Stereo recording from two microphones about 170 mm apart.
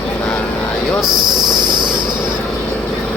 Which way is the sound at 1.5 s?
25° right (ahead or behind).